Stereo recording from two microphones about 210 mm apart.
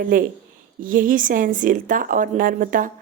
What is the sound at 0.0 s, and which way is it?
Speech, 40° right (ahead or behind).